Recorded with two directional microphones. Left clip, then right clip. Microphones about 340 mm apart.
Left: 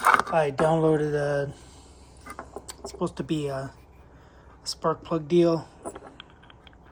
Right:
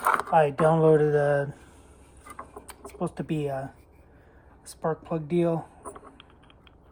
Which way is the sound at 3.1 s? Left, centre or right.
Centre.